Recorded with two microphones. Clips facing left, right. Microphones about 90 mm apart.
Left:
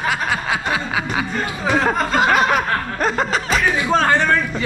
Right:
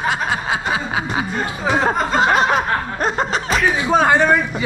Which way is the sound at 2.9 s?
35° right (ahead or behind).